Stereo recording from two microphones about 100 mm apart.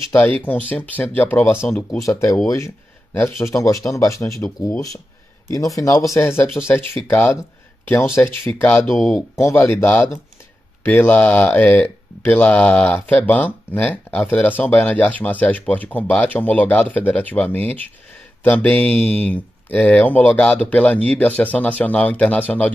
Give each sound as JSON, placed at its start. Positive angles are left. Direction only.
{"t": 0.1, "sound": "speech", "side_deg": 20}
{"t": 2.0, "sound": "speech", "side_deg": 30}
{"t": 3.3, "sound": "speech", "side_deg": 30}
{"t": 8.8, "sound": "speech", "side_deg": 5}
{"t": 9.3, "sound": "speech", "side_deg": 25}